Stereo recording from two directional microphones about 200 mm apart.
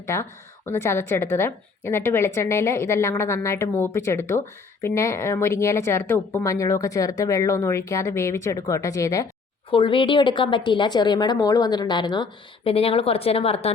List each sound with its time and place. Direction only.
0.0 s a woman's voice: 15° left (ahead or behind)
9.6 s a woman's voice: 25° left (ahead or behind)